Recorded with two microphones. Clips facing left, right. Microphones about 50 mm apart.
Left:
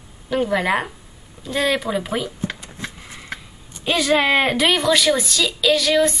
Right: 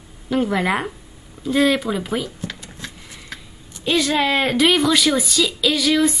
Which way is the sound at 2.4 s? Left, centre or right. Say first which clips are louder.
Left 3 dB; centre.